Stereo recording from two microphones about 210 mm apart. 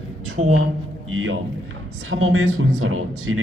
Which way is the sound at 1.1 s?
70° right (ahead or behind).